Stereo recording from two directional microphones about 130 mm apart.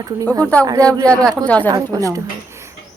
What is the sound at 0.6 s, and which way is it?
Speech, 25° right (ahead or behind).